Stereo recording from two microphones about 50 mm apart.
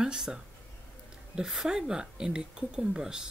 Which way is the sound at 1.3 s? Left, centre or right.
Centre.